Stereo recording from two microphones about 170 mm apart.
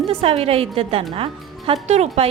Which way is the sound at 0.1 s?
35° right (ahead or behind).